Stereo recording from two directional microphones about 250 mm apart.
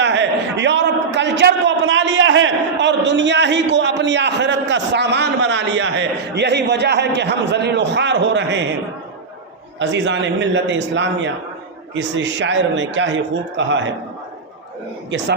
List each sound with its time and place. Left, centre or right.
0.0 s a man's voice: right
9.7 s a man's voice: right